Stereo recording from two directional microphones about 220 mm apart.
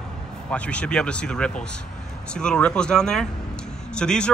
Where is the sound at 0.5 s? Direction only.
5° left (ahead or behind).